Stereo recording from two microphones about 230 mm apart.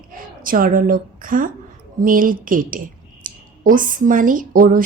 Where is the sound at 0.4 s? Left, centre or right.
Right.